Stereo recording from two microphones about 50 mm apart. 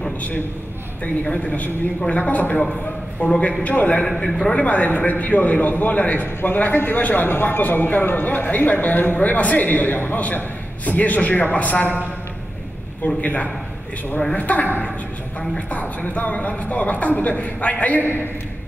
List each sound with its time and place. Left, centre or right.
1.2 s a man's voice: left